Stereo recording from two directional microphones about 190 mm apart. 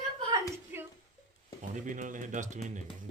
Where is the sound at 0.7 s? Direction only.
10° right (ahead or behind).